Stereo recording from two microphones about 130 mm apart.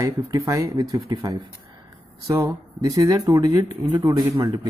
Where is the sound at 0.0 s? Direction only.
30° right (ahead or behind).